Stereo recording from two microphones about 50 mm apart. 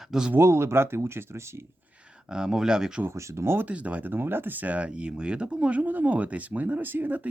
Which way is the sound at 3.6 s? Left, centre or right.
Right.